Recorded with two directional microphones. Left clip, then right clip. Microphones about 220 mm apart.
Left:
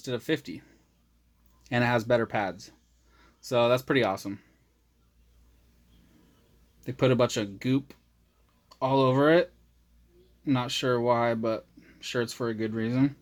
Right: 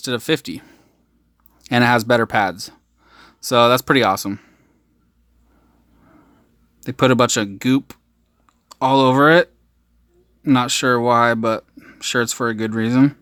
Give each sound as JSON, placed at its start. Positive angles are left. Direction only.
{"t": 0.0, "sound": "speech", "side_deg": -35}
{"t": 6.8, "sound": "speech", "side_deg": -35}